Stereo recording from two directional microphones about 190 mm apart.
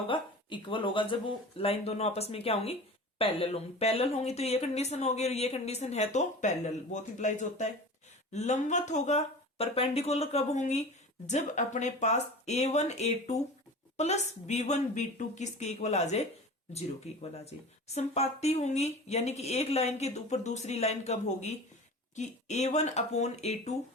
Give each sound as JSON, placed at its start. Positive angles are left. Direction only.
{"t": 0.1, "sound": "speech", "side_deg": 25}
{"t": 17.3, "sound": "speech", "side_deg": 35}